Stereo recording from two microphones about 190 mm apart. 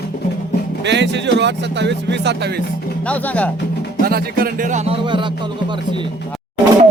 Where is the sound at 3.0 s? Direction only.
10° left (ahead or behind).